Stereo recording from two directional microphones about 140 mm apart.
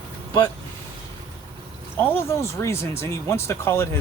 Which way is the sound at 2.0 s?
20° left (ahead or behind).